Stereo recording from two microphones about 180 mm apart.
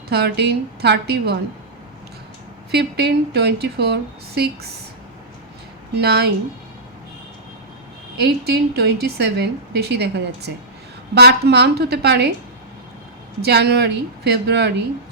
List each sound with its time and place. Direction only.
0.1 s a woman's voice: 65° right (ahead or behind)
2.7 s a woman's voice: 65° right (ahead or behind)
6.0 s a woman's voice: 65° right (ahead or behind)
8.2 s a woman's voice: 65° right (ahead or behind)
13.4 s a woman's voice: 65° right (ahead or behind)